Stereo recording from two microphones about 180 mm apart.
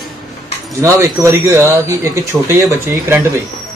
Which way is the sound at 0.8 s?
15° right (ahead or behind).